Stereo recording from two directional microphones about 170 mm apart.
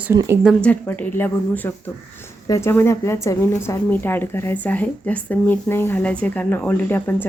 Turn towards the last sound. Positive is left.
turn(degrees=10)  # may be behind; listen again after turning